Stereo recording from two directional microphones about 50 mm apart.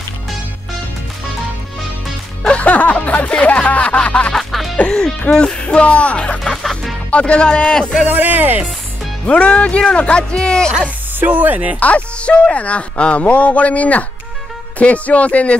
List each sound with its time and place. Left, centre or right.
2.4 s speech: left
4.3 s music: centre
4.7 s music: centre
5.3 s speech: centre
6.4 s music: centre
7.1 s speech: left
8.0 s speech: right
9.2 s speech: left
11.1 s speech: right
11.8 s speech: left